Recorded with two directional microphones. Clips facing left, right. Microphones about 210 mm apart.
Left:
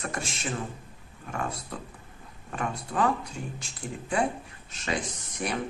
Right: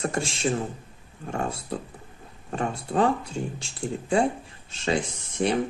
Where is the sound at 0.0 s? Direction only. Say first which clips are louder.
Right 8 dB; 30° right (ahead or behind).